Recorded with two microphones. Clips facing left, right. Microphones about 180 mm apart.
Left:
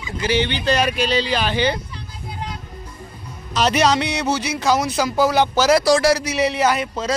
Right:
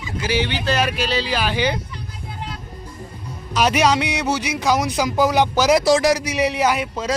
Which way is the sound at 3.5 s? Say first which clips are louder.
Even; 10° right (ahead or behind).